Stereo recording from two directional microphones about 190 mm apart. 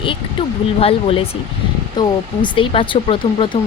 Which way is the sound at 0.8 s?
30° left (ahead or behind).